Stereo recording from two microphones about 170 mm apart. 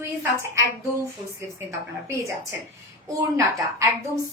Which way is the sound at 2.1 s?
15° right (ahead or behind).